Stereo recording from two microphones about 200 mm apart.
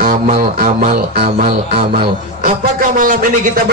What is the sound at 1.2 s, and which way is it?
Speech, 30° right (ahead or behind).